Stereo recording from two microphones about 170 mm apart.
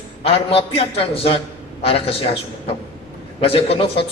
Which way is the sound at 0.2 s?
35° left (ahead or behind).